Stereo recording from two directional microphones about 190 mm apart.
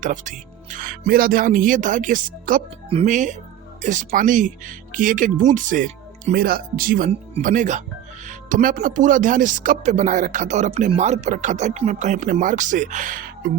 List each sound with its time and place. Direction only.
0.0 s speech: 40° right (ahead or behind)
7.1 s speech: 40° right (ahead or behind)